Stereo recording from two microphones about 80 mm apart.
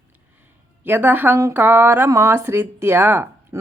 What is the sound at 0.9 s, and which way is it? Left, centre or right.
Speech, right.